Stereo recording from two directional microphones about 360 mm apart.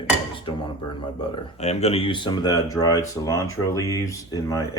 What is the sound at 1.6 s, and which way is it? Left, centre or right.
Speech, centre.